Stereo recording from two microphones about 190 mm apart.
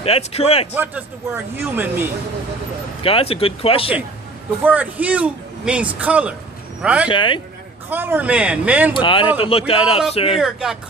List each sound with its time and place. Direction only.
0.0 s speech: 30° left (ahead or behind)
0.8 s a man's voice: 10° right (ahead or behind)
3.0 s speech: 30° left (ahead or behind)
4.6 s a man's voice: 10° right (ahead or behind)
7.1 s speech: 25° left (ahead or behind)
7.9 s a man's voice: 10° right (ahead or behind)
8.9 s speech: 25° left (ahead or behind)
10.3 s speech: 5° right (ahead or behind)